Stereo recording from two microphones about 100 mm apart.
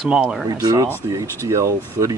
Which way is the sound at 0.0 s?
10° right (ahead or behind).